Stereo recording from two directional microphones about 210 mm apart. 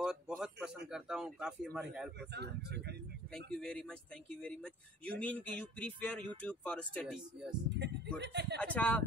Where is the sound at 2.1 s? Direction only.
50° right (ahead or behind).